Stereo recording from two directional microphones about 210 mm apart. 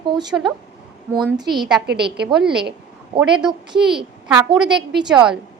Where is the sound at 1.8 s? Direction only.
50° right (ahead or behind).